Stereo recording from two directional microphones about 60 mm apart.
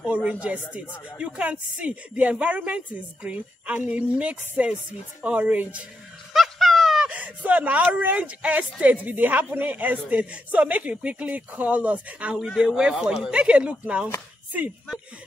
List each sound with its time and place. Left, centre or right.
0.0 s speech: centre
6.3 s dog: centre
7.1 s speech: right
12.4 s speech: centre; by 14.0 s right